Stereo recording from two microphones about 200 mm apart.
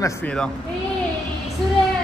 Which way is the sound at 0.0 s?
5° left (ahead or behind).